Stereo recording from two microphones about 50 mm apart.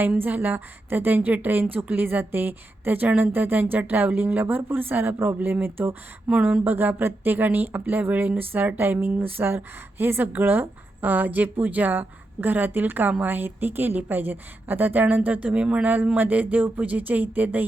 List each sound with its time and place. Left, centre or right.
0.2 s a woman's voice: right
6.3 s speech: right
6.7 s a woman's voice: right
16.1 s a woman's voice: right